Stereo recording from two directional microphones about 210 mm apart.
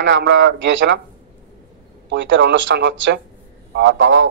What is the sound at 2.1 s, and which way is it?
Speech, 60° right (ahead or behind).